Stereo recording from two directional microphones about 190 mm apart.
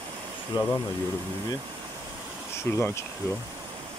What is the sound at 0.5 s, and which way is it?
Speech, 25° left (ahead or behind).